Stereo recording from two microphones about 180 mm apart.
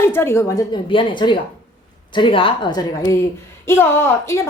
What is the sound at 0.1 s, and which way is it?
A woman's voice, 15° left (ahead or behind).